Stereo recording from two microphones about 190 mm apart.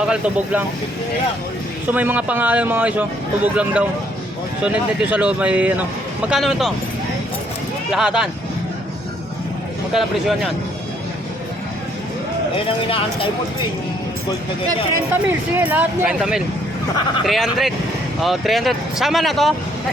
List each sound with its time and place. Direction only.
0.0 s speech: 5° right (ahead or behind)
1.9 s speech: 10° right (ahead or behind)
7.9 s speech: 5° right (ahead or behind)
9.9 s speech: centre (ahead or behind)
12.5 s speech: 30° left (ahead or behind)
15.1 s speech: 10° right (ahead or behind)